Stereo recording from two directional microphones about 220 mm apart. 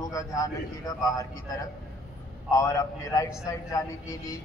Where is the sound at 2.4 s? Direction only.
15° left (ahead or behind).